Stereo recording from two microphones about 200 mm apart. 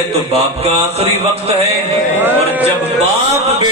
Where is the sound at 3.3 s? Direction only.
30° right (ahead or behind).